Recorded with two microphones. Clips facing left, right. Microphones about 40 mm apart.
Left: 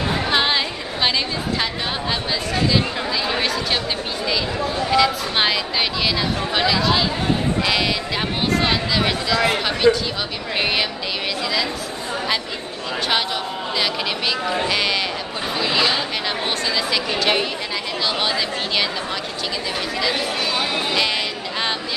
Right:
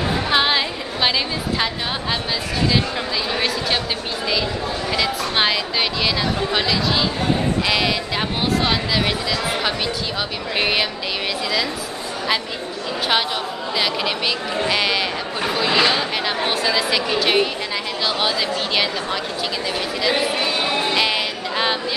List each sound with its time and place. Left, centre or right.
0.3 s a sound: centre
3.3 s speech: centre
4.9 s speech: centre
9.9 s speech: left
10.6 s speech: centre
14.7 s speech: centre
20.0 s speech: centre